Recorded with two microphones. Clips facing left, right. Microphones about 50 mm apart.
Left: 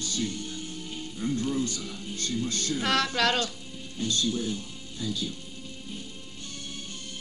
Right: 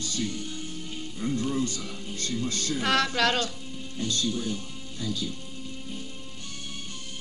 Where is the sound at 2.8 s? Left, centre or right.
Centre.